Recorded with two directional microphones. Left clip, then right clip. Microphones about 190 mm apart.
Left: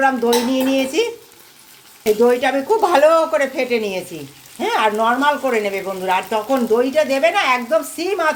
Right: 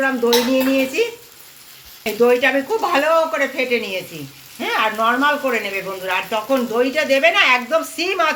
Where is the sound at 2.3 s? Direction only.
55° left (ahead or behind).